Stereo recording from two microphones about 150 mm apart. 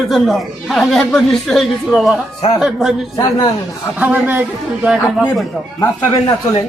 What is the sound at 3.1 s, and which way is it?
Speech, 25° left (ahead or behind).